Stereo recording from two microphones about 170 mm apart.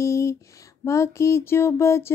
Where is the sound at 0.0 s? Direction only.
15° left (ahead or behind).